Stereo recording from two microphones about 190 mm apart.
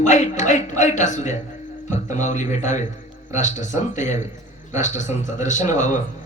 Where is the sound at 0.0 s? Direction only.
40° left (ahead or behind).